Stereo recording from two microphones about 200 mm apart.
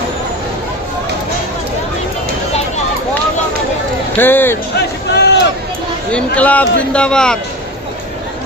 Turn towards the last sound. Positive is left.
turn(degrees=5)  # may be behind; listen again after turning